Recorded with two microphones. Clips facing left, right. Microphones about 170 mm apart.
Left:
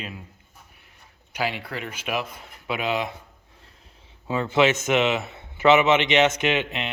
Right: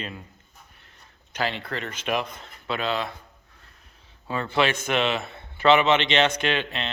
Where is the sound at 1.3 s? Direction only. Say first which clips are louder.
Even; 10° left (ahead or behind).